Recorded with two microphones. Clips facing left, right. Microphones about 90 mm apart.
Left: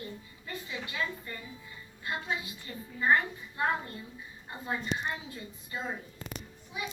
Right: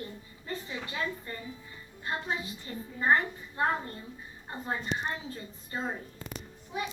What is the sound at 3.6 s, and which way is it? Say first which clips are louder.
A woman's voice: right 1 dB; 30° right (ahead or behind).